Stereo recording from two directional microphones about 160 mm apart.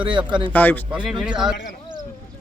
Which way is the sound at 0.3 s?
30° right (ahead or behind).